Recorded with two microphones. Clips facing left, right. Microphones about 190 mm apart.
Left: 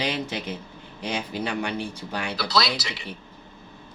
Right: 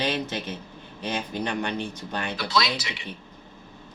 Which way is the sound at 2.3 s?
40° left (ahead or behind).